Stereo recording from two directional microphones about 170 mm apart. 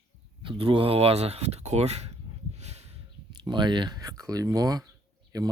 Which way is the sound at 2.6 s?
40° right (ahead or behind).